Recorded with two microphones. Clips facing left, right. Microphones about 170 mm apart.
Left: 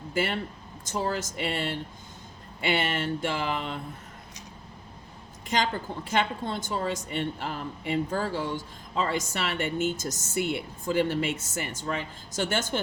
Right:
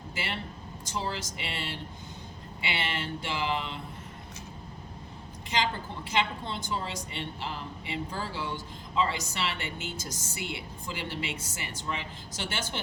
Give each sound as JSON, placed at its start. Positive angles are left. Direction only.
{"t": 0.1, "sound": "a woman's voice", "side_deg": 50}
{"t": 6.1, "sound": "a woman's voice", "side_deg": 50}